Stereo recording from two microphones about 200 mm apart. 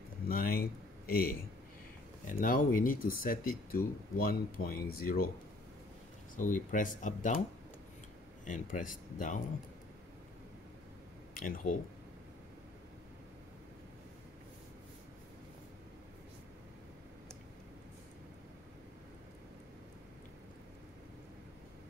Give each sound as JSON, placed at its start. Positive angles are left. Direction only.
{"t": 0.3, "sound": "a sound", "side_deg": 45}
{"t": 2.2, "sound": "speech", "side_deg": 45}
{"t": 6.3, "sound": "speech", "side_deg": 40}
{"t": 8.5, "sound": "speech", "side_deg": 40}
{"t": 11.3, "sound": "speech", "side_deg": 40}